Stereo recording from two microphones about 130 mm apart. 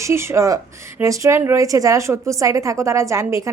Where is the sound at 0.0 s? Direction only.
20° right (ahead or behind).